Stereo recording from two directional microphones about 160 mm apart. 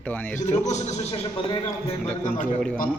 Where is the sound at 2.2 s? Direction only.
50° left (ahead or behind).